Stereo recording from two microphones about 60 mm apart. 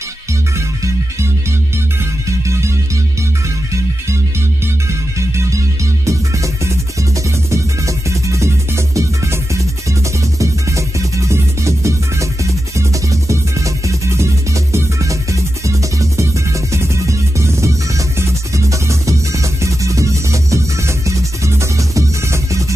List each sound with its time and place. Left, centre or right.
2.4 s music: right
6.0 s music: right
10.4 s music: right